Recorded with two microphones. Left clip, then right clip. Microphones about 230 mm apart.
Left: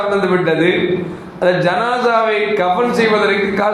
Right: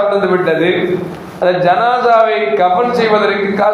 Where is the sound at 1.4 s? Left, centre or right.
Left.